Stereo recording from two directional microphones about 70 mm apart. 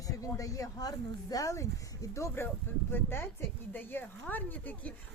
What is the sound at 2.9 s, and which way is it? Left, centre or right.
Speech, left.